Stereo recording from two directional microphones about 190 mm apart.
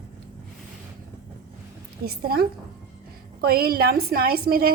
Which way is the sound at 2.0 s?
50° right (ahead or behind).